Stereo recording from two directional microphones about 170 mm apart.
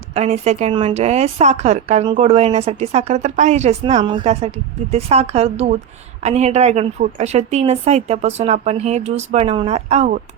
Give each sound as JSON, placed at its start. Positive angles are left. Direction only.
{"t": 0.1, "sound": "a woman's voice", "side_deg": -40}
{"t": 4.0, "sound": "a woman's voice", "side_deg": -30}
{"t": 4.3, "sound": "a woman's voice", "side_deg": -40}